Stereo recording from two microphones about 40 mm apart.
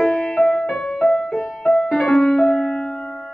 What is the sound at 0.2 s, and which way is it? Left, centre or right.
Music, centre.